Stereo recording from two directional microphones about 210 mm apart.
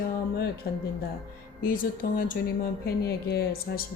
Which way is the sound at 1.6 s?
40° left (ahead or behind).